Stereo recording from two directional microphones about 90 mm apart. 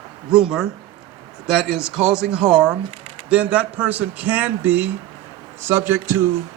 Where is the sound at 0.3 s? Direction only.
5° right (ahead or behind).